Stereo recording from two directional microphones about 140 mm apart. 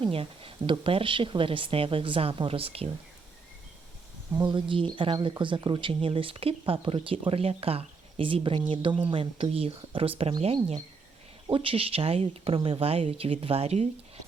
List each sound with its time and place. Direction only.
0.0 s speech: 40° right (ahead or behind)
4.4 s speech: 35° right (ahead or behind)